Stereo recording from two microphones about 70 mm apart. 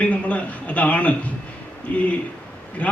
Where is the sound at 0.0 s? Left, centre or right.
Centre.